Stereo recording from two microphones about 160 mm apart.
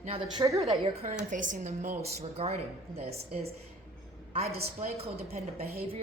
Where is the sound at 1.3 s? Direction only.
55° right (ahead or behind).